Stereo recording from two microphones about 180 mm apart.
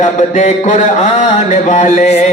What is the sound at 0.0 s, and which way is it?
Mantra, 40° left (ahead or behind).